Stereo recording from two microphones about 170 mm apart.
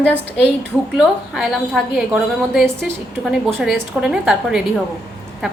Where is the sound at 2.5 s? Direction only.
70° left (ahead or behind).